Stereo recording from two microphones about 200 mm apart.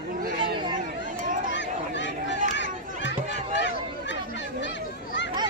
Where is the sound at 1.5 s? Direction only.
65° left (ahead or behind).